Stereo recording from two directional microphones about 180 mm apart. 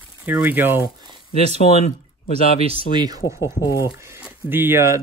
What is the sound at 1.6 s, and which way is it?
Speech, 40° left (ahead or behind).